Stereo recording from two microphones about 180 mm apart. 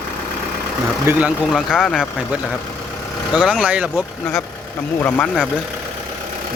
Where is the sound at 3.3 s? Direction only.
Centre (ahead or behind).